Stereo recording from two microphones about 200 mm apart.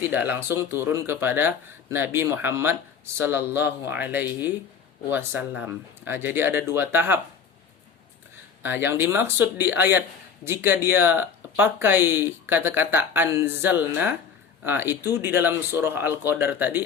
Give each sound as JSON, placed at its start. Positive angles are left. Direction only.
{"t": 0.1, "sound": "speech", "side_deg": -10}
{"t": 8.6, "sound": "speech", "side_deg": -10}